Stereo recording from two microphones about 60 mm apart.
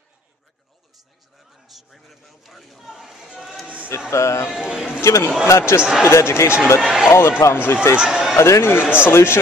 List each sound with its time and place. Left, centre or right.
1.7 s speech: centre
3.3 s music: centre
3.6 s a sound: right
4.1 s speech: left
4.6 s speech: centre
5.0 s speech: left
5.8 s speech: centre
6.0 s speech: left
6.8 s speech: centre
7.1 s speech: left
8.0 s a man's voice: centre
8.4 s speech: left